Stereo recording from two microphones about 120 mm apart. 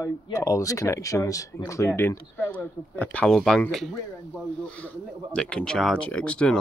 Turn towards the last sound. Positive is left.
turn(degrees=10)  # may be behind; listen again after turning